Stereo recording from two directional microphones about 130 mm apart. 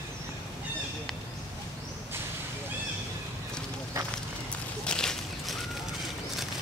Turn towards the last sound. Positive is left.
turn(degrees=5)  # may be behind; listen again after turning